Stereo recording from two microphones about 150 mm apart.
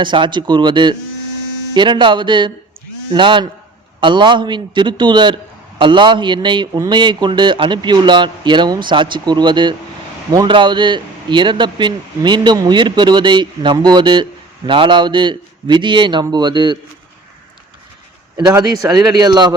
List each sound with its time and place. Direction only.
0.0 s speech: 30° right (ahead or behind)
18.3 s speech: 20° right (ahead or behind)